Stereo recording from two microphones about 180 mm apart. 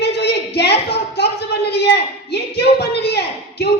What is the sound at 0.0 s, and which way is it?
A woman's voice, 65° left (ahead or behind).